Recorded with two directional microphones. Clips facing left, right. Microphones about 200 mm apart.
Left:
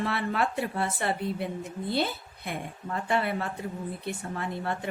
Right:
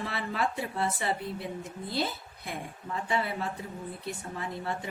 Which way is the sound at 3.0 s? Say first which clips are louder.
Left 3 dB; 60° left (ahead or behind).